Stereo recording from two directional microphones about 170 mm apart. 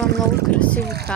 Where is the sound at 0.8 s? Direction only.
70° right (ahead or behind).